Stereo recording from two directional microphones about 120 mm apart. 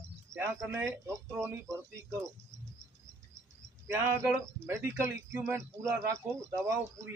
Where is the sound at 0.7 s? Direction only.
25° right (ahead or behind).